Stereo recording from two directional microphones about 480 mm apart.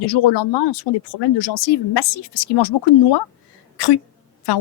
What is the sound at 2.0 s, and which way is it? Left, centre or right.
Speech, left.